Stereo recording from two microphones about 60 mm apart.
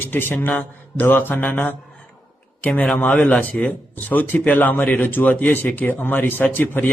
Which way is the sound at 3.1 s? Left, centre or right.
Centre.